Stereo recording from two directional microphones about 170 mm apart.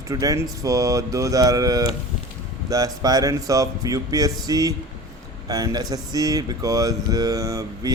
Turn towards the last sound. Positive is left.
turn(degrees=-20)  # may be behind; listen again after turning